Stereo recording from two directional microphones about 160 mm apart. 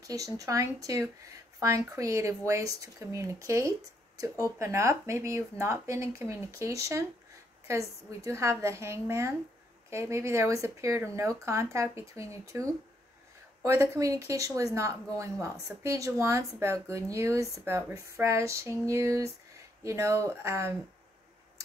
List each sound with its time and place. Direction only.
0.0 s speech: 20° right (ahead or behind)
8.2 s speech: 15° right (ahead or behind)
13.7 s speech: 20° right (ahead or behind)